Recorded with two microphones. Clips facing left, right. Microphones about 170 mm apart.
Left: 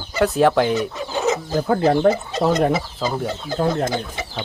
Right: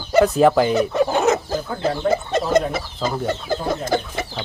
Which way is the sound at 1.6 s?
60° left (ahead or behind).